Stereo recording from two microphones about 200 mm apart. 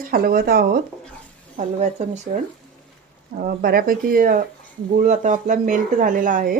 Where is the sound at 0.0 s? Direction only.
45° right (ahead or behind).